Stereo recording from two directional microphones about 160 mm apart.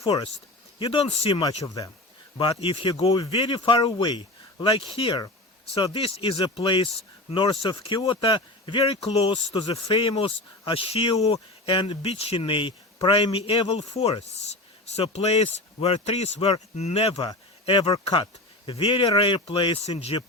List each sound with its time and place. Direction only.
0.0 s speech: 30° left (ahead or behind)
1.6 s speech: 20° left (ahead or behind)
2.4 s speech: 30° left (ahead or behind)
3.2 s speech: 35° left (ahead or behind)